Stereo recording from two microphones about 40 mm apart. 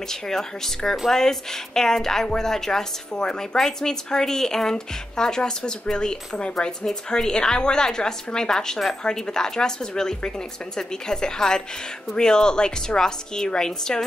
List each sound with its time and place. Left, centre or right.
0.0 s speech: centre